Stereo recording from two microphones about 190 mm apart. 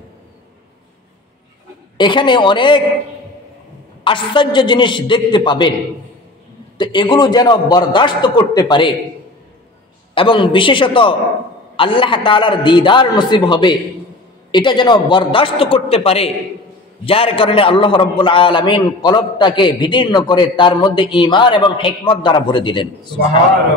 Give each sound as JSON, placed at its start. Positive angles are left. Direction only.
{"t": 2.0, "sound": "a man's voice", "side_deg": 25}
{"t": 4.0, "sound": "a man's voice", "side_deg": 25}
{"t": 6.8, "sound": "a man's voice", "side_deg": 25}
{"t": 10.1, "sound": "a man's voice", "side_deg": 25}